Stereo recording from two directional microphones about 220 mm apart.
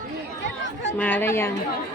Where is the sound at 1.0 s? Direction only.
5° left (ahead or behind).